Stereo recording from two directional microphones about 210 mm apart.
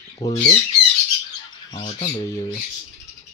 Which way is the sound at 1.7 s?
25° left (ahead or behind).